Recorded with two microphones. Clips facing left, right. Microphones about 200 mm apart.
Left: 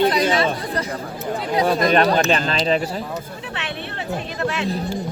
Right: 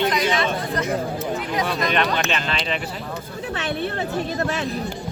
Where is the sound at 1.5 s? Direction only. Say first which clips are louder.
Left 7 dB; 40° left (ahead or behind).